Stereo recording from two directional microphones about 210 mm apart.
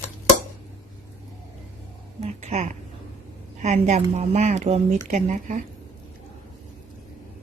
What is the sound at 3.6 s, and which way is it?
Speech, 30° right (ahead or behind).